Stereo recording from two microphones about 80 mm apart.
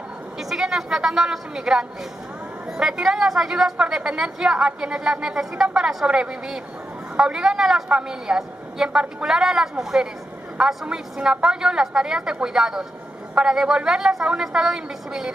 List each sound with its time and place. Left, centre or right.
0.4 s a woman's voice: centre